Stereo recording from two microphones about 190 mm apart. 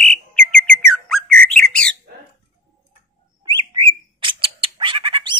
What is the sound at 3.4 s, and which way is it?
Bird, 25° right (ahead or behind).